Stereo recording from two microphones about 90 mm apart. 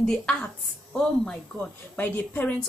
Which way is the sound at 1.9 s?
20° left (ahead or behind).